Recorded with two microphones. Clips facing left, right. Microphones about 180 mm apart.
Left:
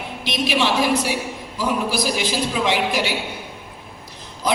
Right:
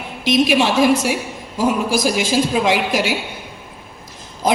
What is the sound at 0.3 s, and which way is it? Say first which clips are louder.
A woman's voice: right 6 dB; 45° right (ahead or behind).